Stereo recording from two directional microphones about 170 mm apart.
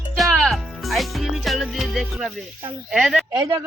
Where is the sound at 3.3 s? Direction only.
25° right (ahead or behind).